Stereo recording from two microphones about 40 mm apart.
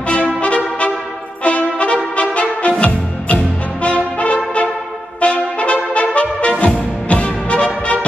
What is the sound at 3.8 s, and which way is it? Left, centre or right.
Brass instrument, left.